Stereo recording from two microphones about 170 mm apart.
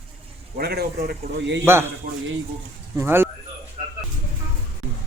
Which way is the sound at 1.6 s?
15° right (ahead or behind).